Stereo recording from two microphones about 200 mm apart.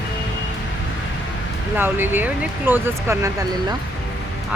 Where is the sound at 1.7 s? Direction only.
10° right (ahead or behind).